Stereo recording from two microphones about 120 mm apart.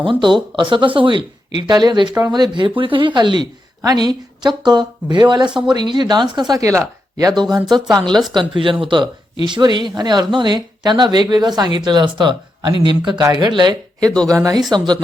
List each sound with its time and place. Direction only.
0.0 s a woman's voice: 40° right (ahead or behind)